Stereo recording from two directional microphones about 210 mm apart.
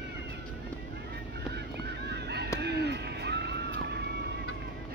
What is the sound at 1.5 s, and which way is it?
Honk, 50° right (ahead or behind).